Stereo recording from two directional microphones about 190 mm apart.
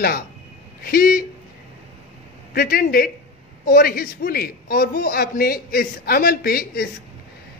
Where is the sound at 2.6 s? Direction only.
50° left (ahead or behind).